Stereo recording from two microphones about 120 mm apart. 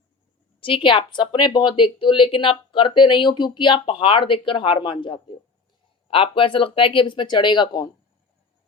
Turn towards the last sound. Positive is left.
turn(degrees=40)  # may be behind; listen again after turning